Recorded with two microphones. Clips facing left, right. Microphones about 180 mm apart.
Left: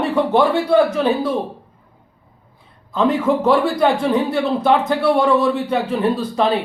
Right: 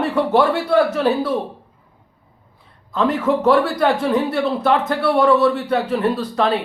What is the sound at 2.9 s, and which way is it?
Speech, centre (ahead or behind).